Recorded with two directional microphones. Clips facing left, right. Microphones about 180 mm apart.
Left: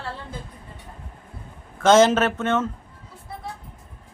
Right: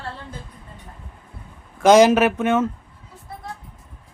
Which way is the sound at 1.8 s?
15° right (ahead or behind).